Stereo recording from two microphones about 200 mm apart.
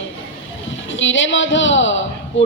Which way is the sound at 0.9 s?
70° left (ahead or behind).